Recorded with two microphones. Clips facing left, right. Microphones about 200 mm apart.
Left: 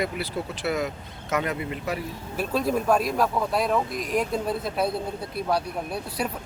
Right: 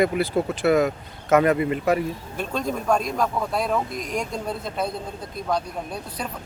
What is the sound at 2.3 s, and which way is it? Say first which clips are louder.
Speech: left 4 dB; 5° left (ahead or behind).